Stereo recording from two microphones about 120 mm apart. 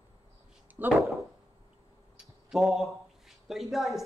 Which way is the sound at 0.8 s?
15° right (ahead or behind).